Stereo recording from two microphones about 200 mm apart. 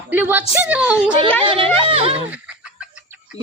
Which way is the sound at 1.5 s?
25° right (ahead or behind).